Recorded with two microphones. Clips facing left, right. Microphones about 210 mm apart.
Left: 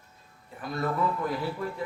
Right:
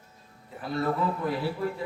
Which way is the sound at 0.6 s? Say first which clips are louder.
Right 2 dB; 30° right (ahead or behind).